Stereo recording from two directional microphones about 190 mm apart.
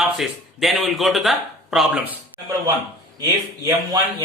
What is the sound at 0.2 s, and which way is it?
A man's voice, centre (ahead or behind).